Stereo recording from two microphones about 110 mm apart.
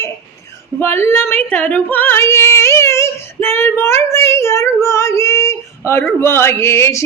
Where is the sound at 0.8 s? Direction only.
20° left (ahead or behind).